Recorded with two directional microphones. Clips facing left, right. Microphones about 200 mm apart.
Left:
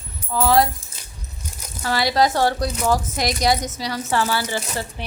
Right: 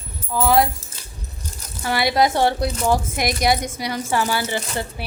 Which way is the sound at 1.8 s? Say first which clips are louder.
Even; 20° right (ahead or behind).